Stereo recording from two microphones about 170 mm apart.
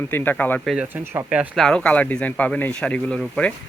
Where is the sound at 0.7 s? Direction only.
10° right (ahead or behind).